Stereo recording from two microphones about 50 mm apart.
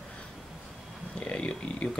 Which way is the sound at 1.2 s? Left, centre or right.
Left.